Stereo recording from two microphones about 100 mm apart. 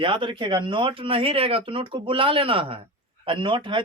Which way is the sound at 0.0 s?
55° right (ahead or behind).